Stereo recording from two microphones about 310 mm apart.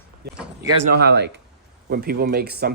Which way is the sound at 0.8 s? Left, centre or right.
Right.